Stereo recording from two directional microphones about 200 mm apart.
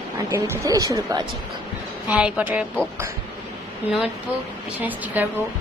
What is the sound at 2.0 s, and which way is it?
Speech, 5° right (ahead or behind).